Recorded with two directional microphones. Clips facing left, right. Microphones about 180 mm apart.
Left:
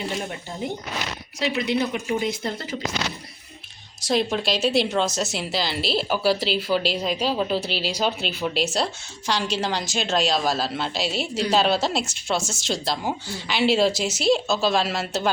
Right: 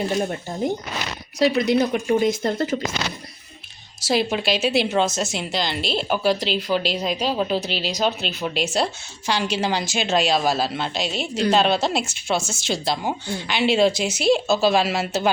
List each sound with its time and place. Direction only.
0.2 s speech: 40° right (ahead or behind)
4.0 s speech: 5° right (ahead or behind)